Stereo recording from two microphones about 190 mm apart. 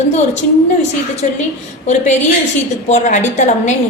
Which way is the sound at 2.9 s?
40° left (ahead or behind).